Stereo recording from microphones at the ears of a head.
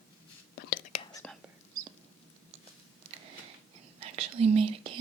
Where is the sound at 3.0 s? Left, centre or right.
Right.